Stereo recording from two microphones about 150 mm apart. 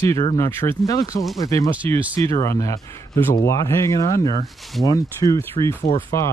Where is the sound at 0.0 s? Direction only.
20° left (ahead or behind).